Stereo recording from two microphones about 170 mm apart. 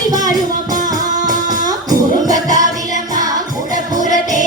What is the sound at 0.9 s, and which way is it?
Music, 20° right (ahead or behind).